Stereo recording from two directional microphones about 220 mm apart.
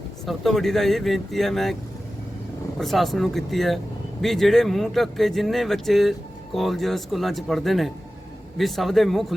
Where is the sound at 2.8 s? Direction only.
Centre (ahead or behind).